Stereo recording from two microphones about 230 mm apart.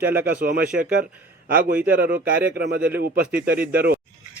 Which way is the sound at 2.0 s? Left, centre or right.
Centre.